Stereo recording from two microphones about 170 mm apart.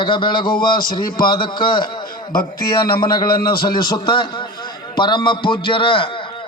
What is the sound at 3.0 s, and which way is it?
A man's voice, 25° left (ahead or behind).